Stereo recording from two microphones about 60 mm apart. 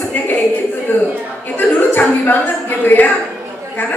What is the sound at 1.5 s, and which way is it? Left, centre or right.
A woman's voice, left.